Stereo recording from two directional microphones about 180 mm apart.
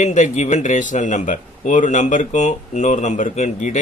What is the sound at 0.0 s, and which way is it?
Speech, 40° left (ahead or behind).